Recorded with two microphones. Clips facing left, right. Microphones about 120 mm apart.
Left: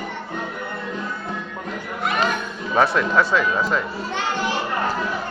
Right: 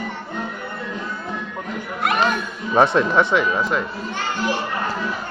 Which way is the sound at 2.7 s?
25° right (ahead or behind).